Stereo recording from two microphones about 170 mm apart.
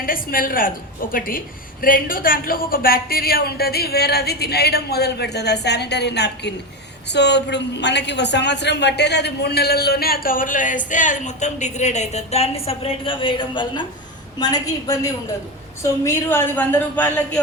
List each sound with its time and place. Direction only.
0.0 s a woman's voice: 55° left (ahead or behind); by 17.4 s 10° left (ahead or behind)